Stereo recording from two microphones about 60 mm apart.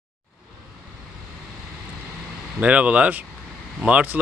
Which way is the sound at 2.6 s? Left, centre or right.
Right.